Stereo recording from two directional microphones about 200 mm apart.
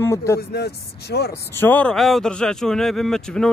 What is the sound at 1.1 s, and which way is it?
Speech, 55° left (ahead or behind).